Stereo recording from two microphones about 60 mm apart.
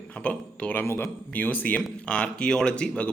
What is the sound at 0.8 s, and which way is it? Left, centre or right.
A man's voice, left.